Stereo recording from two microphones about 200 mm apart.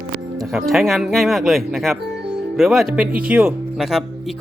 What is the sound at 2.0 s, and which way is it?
Music, 60° right (ahead or behind).